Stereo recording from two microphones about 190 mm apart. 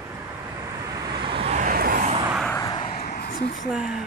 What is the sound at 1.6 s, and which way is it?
Vehicle, 50° right (ahead or behind).